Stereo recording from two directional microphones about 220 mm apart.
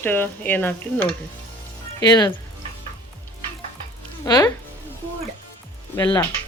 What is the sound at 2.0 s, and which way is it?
Speech, 20° left (ahead or behind).